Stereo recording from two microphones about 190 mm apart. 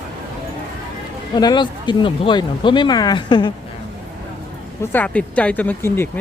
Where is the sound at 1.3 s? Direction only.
20° left (ahead or behind).